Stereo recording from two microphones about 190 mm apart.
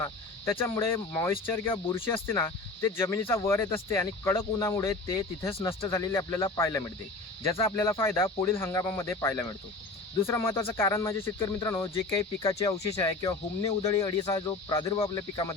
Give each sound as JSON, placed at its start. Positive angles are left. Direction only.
{"t": 0.6, "sound": "speech", "side_deg": 15}
{"t": 15.0, "sound": "cricket", "side_deg": 20}